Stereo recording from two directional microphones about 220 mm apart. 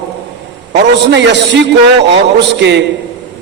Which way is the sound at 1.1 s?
50° right (ahead or behind).